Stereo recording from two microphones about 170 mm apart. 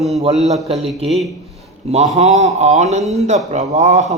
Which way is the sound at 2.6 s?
40° right (ahead or behind).